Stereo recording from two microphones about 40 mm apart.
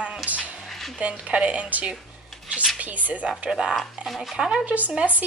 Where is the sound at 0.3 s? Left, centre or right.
Right.